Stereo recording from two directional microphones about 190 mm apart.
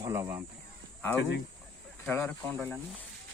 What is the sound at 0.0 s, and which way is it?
Speech, 15° right (ahead or behind).